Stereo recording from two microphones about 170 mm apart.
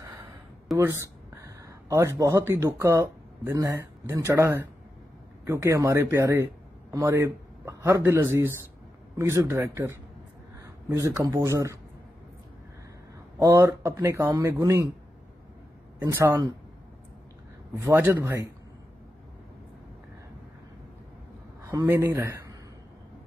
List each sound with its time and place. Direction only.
0.0 s gasp: 20° right (ahead or behind)
1.4 s a man's voice: 15° right (ahead or behind)
13.4 s a man's voice: 15° right (ahead or behind)
16.0 s a man's voice: 15° right (ahead or behind)
17.7 s a man's voice: 15° right (ahead or behind)
21.6 s speech: 15° right (ahead or behind)